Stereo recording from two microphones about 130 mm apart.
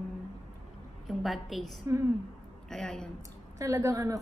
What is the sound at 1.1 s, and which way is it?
A woman's voice, centre (ahead or behind).